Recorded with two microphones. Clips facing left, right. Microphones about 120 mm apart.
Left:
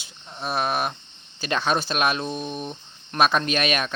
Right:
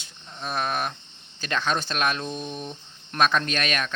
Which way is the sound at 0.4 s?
10° left (ahead or behind).